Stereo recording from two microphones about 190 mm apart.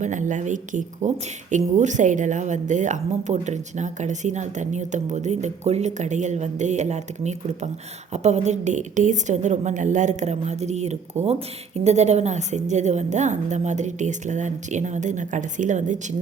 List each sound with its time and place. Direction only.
0.0 s a woman's voice: 40° right (ahead or behind)